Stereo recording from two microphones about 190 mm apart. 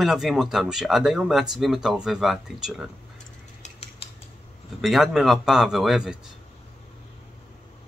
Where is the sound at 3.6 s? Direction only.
35° left (ahead or behind).